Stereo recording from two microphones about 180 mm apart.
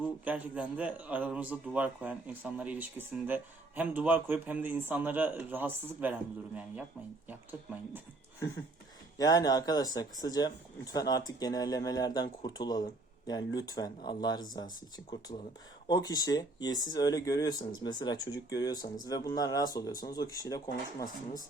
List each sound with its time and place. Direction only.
0.0 s a man's voice: 10° right (ahead or behind)
9.1 s speech: 20° left (ahead or behind)
15.9 s speech: 20° left (ahead or behind)